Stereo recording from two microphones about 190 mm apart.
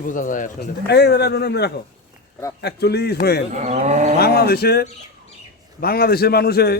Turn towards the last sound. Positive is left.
turn(degrees=55)  # may be behind; listen again after turning